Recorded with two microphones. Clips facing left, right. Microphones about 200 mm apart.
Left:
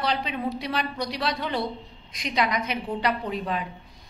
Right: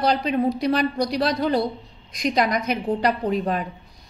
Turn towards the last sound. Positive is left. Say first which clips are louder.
# right 6 dB
turn(degrees=-45)  # may be behind; listen again after turning